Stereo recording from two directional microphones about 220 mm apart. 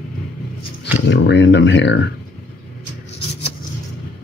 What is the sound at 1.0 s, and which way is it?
Speech, 55° left (ahead or behind).